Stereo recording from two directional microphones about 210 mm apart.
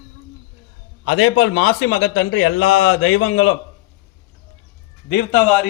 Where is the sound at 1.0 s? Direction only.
75° left (ahead or behind).